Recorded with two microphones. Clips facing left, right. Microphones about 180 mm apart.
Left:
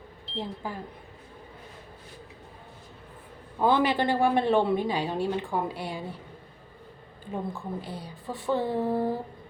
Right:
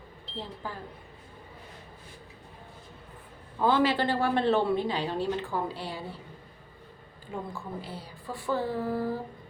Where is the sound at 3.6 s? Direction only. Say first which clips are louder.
Left 1 dB; 15° left (ahead or behind).